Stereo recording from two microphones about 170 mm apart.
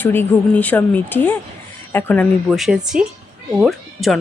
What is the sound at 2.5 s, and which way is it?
A woman's voice, centre (ahead or behind).